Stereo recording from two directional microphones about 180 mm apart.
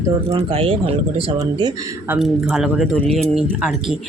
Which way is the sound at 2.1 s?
5° right (ahead or behind).